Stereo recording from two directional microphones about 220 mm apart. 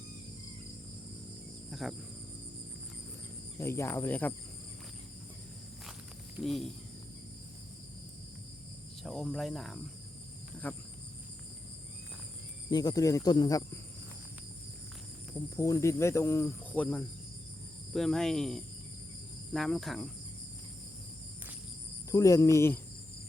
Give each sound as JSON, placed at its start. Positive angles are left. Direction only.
{"t": 1.7, "sound": "speech", "side_deg": 0}
{"t": 3.6, "sound": "cricket", "side_deg": 10}
{"t": 6.4, "sound": "cricket", "side_deg": 0}
{"t": 9.0, "sound": "cricket", "side_deg": 0}
{"t": 12.7, "sound": "cricket", "side_deg": 20}
{"t": 15.5, "sound": "cricket", "side_deg": 15}
{"t": 22.1, "sound": "cricket", "side_deg": 15}